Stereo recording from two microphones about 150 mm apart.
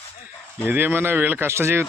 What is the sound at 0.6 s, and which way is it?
Speech, 10° right (ahead or behind).